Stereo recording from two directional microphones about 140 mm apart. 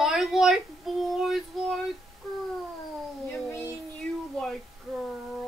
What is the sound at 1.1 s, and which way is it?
Child singing, centre (ahead or behind).